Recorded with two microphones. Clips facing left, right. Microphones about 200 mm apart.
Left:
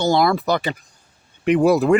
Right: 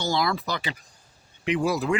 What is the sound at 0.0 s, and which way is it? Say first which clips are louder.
Speech: left 8 dB; 55° left (ahead or behind).